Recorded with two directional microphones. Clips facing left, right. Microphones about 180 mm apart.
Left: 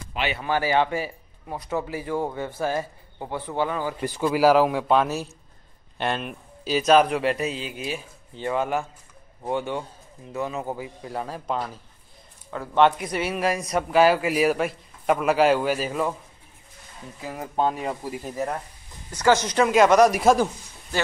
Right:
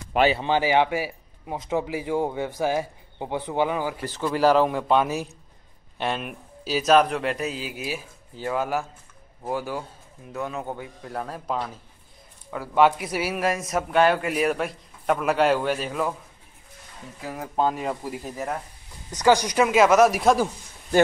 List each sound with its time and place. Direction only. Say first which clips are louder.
0.2 s speech: right 8 dB; 30° right (ahead or behind)
0.5 s a man's voice: right 1 dB; 15° right (ahead or behind)
4.0 s speech: left 3 dB; 10° left (ahead or behind)
5.0 s a man's voice: even; 10° right (ahead or behind)
17.2 s speech: even; centre (ahead or behind)
19.0 s speech: right 1 dB; 15° right (ahead or behind); by 20.4 s centre (ahead or behind)